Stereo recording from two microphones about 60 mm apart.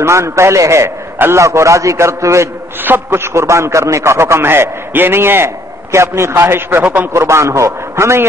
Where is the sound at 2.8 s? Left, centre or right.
Right.